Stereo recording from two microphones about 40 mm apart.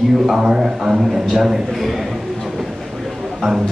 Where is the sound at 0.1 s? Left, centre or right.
Centre.